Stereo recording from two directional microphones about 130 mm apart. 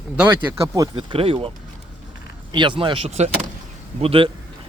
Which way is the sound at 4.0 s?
45° right (ahead or behind).